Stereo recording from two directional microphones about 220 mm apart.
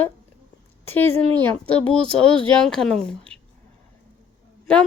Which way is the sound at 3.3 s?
5° left (ahead or behind).